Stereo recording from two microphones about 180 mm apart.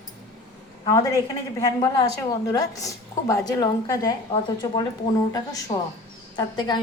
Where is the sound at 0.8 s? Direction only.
20° left (ahead or behind).